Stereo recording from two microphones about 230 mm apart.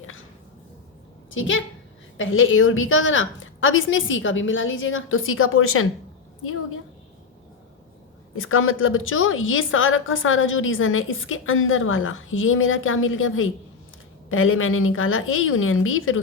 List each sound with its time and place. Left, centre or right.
1.3 s a woman's voice: left
8.4 s a woman's voice: left